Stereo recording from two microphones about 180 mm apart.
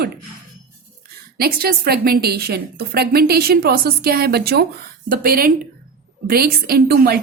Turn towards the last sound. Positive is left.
turn(degrees=-60)  # may be behind; listen again after turning